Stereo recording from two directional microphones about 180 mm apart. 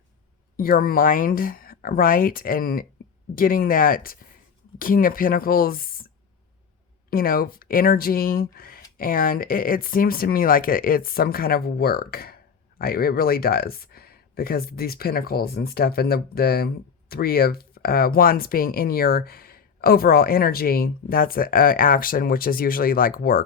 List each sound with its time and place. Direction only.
0.5 s speech: 55° left (ahead or behind)
7.1 s speech: 55° left (ahead or behind)